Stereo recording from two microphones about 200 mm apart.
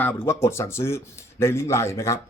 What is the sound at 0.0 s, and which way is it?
A man's voice, 10° left (ahead or behind).